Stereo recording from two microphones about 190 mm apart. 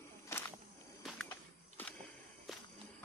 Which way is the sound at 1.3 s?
10° left (ahead or behind).